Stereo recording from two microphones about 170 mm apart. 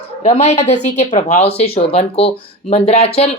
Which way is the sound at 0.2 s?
40° left (ahead or behind).